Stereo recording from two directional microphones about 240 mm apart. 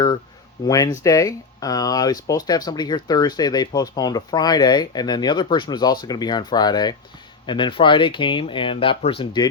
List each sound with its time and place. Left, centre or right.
0.6 s speech: centre